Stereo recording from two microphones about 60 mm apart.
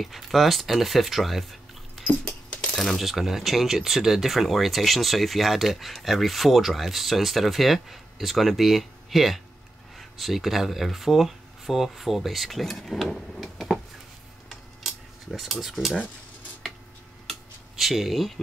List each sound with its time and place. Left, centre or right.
0.0 s speech: centre
2.0 s a sound: centre
2.7 s speech: centre
3.0 s speech: centre
14.5 s cutlery: centre
15.8 s speech: centre
17.3 s a sound: centre